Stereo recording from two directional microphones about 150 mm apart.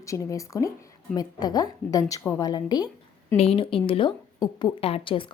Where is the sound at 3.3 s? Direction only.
40° left (ahead or behind).